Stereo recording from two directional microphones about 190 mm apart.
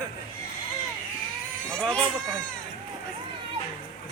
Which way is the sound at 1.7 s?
5° left (ahead or behind).